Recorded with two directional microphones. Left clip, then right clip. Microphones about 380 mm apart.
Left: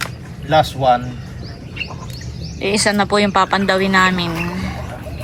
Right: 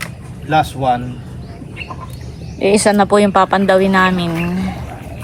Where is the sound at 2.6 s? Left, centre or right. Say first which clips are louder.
Right 5 dB; centre.